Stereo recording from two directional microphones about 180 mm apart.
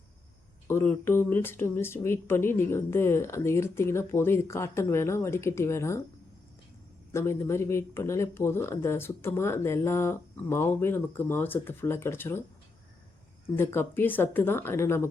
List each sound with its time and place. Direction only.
0.7 s speech: 15° left (ahead or behind)
7.1 s speech: 15° left (ahead or behind)
13.6 s speech: 10° left (ahead or behind)